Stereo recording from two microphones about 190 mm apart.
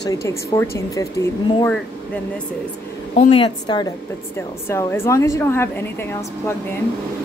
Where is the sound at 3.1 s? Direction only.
30° left (ahead or behind); by 5.7 s 10° left (ahead or behind).